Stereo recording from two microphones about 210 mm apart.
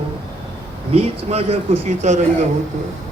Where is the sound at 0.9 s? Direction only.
30° right (ahead or behind).